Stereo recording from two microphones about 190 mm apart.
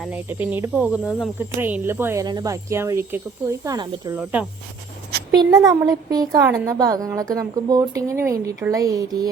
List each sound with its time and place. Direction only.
0.0 s speech: 10° right (ahead or behind)
4.1 s speech: 10° right (ahead or behind)